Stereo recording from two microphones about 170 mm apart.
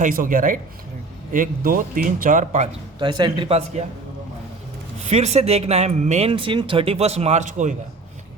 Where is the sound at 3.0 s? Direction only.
25° right (ahead or behind).